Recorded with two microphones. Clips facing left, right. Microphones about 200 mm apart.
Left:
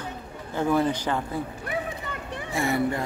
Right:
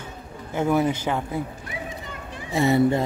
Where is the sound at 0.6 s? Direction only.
10° right (ahead or behind).